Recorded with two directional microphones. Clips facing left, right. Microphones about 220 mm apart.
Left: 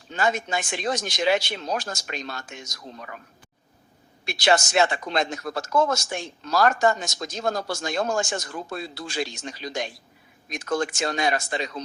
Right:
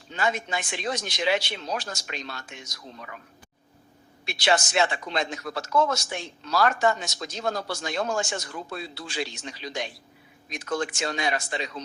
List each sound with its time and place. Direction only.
0.1 s speech: 45° left (ahead or behind)
4.3 s speech: 45° left (ahead or behind)